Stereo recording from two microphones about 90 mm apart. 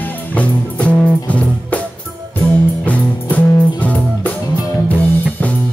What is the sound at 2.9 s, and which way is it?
Music, 15° left (ahead or behind).